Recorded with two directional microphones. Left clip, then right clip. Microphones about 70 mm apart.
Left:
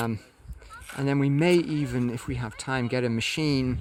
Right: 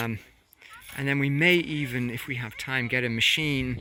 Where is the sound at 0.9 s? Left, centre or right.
Left.